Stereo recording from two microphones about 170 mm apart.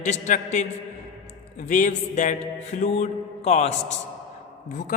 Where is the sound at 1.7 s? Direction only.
50° left (ahead or behind).